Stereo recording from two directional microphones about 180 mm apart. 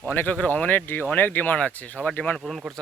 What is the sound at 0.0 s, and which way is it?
Speech, 10° left (ahead or behind).